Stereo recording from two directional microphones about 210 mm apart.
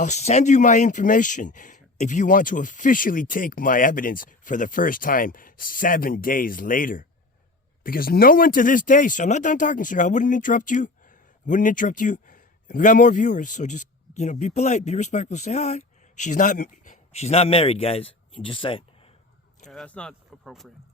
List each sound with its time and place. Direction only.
0.0 s speech: 35° left (ahead or behind)
19.7 s speech: 5° left (ahead or behind)